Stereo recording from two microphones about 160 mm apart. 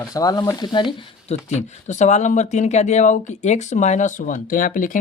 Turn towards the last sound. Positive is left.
turn(degrees=60)  # may be behind; listen again after turning